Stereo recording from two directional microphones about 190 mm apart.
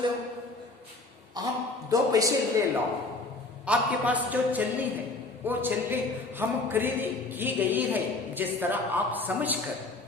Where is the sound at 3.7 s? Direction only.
10° right (ahead or behind).